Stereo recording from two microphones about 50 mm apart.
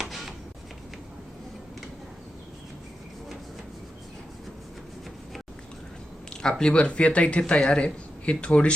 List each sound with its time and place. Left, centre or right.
0.1 s shuffling cards: centre
6.3 s speech: centre